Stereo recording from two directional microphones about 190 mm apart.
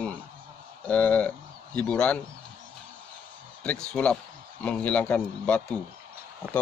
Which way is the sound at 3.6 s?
5° left (ahead or behind).